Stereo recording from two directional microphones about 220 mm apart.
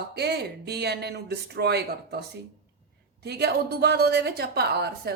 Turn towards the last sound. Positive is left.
turn(degrees=-45)  # may be behind; listen again after turning